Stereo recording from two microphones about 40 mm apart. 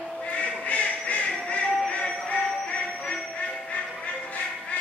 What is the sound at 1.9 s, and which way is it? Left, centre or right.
Music, left.